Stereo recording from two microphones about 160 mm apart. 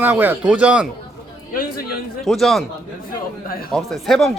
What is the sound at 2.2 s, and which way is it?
Speech, centre (ahead or behind).